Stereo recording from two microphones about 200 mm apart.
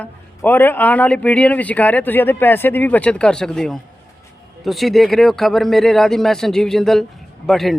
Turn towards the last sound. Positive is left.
turn(degrees=0)  # may be behind; listen again after turning